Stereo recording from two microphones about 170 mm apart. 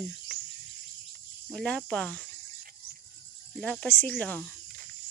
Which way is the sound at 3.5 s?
5° left (ahead or behind).